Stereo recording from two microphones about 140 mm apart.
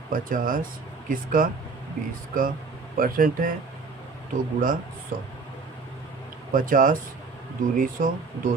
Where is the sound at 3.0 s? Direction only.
80° right.